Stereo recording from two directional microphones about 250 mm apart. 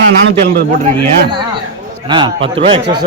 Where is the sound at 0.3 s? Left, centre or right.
Right.